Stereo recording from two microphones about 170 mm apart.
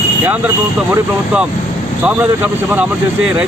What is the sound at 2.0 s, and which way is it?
Speech, 10° right (ahead or behind).